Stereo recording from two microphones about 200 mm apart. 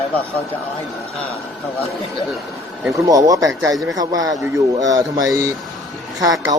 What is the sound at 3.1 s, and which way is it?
Speech, 15° right (ahead or behind).